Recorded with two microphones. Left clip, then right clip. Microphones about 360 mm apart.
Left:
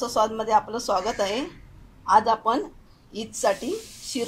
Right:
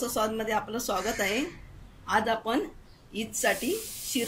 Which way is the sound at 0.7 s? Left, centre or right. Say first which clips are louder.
Left 5 dB; left.